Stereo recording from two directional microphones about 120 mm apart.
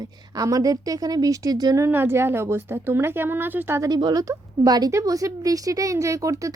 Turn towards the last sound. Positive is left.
turn(degrees=-25)  # may be behind; listen again after turning